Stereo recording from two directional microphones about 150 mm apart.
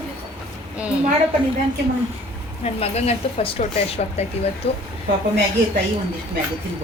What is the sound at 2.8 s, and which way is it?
Speech, 45° left (ahead or behind).